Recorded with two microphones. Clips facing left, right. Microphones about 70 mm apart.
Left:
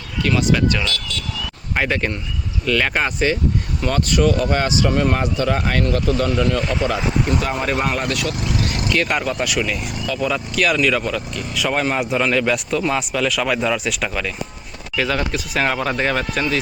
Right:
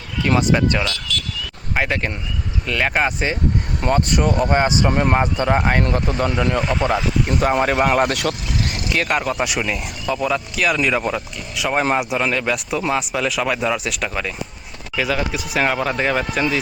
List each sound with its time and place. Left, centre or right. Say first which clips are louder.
0.3 s speech: right 1 dB; right
1.7 s speech: left 1 dB; centre
4.1 s speech: even; right
6.6 s speech: right 1 dB; centre
7.5 s speech: right 4 dB; right
8.9 s speech: right 1 dB; centre
10.8 s speech: left 1 dB; centre
11.3 s speech: left 2 dB; centre
11.7 s speech: right 3 dB; right
11.9 s speech: left 2 dB; centre